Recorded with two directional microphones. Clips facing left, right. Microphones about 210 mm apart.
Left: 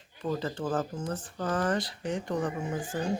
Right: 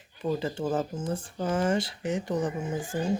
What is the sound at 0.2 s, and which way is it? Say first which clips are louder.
Speech: right 3 dB; 10° right (ahead or behind).